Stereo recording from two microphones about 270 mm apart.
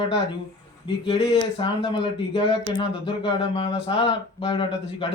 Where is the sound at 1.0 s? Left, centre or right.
Centre.